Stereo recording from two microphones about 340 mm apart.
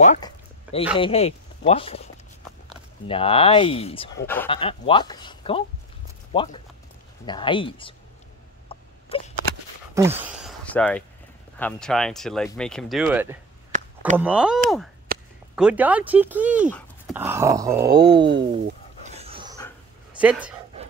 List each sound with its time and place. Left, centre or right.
0.0 s a sound: centre
0.9 s speech: centre
3.1 s speech: centre
8.7 s a sound: centre
9.1 s speech: centre
9.9 s speech: centre
13.7 s a sound: right
14.1 s speech: centre
15.1 s a sound: right
15.5 s speech: centre
17.8 s speech: right
19.0 s dog: centre
20.2 s speech: centre